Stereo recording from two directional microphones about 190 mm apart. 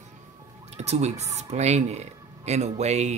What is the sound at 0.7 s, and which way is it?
Speech, 35° right (ahead or behind).